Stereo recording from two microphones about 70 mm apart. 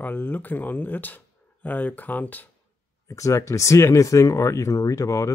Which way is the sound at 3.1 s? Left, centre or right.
Left.